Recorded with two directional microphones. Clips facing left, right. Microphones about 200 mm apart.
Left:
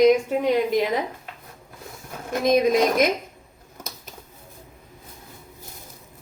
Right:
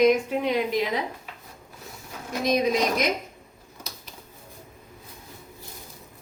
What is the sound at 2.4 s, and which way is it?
Speech, 50° left (ahead or behind).